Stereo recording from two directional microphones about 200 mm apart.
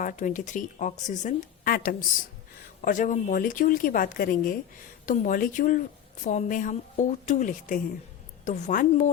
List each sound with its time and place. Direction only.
0.0 s speech: 40° left (ahead or behind)